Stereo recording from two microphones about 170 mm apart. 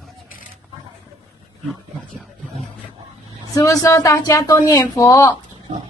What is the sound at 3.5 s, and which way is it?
A woman's voice, 20° left (ahead or behind).